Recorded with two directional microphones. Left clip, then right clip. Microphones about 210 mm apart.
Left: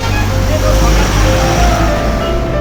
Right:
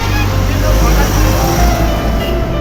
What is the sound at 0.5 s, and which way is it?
Vehicle, 50° left (ahead or behind).